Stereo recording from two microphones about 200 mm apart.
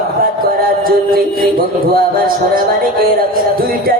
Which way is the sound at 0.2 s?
45° right (ahead or behind).